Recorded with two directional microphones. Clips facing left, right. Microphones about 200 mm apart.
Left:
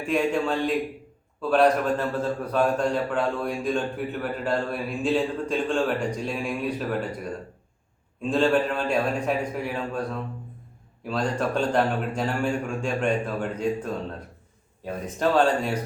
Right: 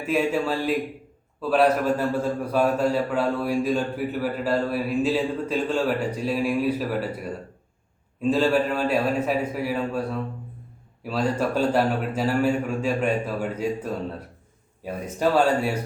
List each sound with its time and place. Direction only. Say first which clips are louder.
0.0 s a man's voice: right 1 dB; 5° right (ahead or behind)